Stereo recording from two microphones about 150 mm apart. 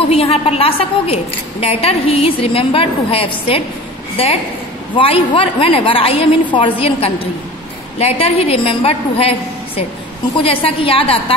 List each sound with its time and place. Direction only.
0.1 s a woman's voice: 40° left (ahead or behind)
4.9 s a woman's voice: 35° left (ahead or behind)
10.3 s a woman's voice: 40° left (ahead or behind)